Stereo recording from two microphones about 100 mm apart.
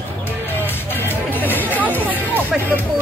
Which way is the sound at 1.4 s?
20° left (ahead or behind).